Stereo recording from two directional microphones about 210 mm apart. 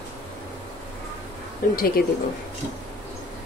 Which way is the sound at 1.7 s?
45° left (ahead or behind).